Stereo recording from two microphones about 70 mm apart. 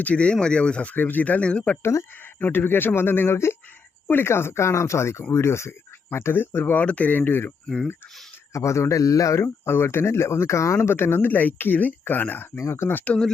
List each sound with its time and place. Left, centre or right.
0.0 s speech: centre
1.8 s a man's voice: left
2.4 s speech: left
6.8 s speech: left
8.5 s a man's voice: left
9.6 s speech: left
12.5 s speech: left